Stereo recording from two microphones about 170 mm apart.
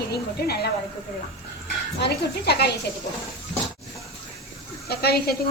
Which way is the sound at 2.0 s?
75° left (ahead or behind).